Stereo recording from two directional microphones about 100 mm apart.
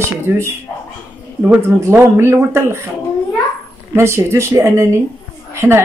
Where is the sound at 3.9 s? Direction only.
25° right (ahead or behind).